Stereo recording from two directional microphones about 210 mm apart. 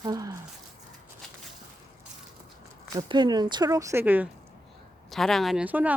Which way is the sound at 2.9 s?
20° right (ahead or behind).